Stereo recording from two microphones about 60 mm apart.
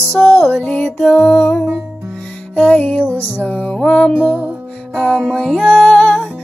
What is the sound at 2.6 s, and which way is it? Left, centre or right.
Music, left.